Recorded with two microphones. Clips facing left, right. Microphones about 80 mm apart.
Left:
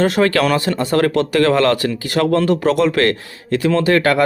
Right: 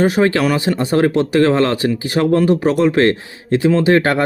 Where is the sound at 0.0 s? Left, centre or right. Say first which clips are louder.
Right 1 dB; centre.